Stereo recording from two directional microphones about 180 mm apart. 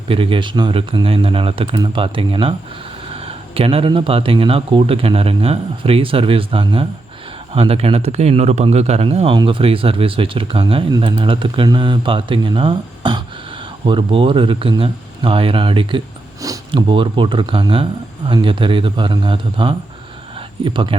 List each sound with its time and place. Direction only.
0.1 s speech: 30° right (ahead or behind)